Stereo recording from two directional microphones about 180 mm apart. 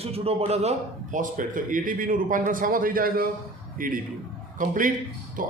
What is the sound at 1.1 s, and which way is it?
A man's voice, 45° right (ahead or behind).